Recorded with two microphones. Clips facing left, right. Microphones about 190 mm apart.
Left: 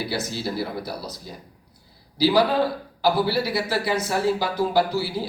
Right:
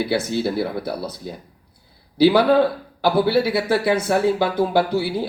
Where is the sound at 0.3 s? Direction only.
60° right (ahead or behind).